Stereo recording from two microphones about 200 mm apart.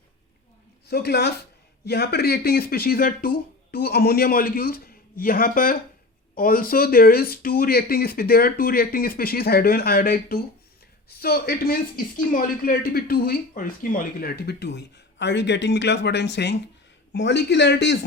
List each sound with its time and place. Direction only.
0.9 s speech: 55° left (ahead or behind)